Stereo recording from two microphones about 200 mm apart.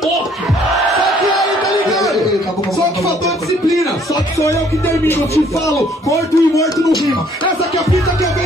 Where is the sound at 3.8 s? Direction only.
15° left (ahead or behind).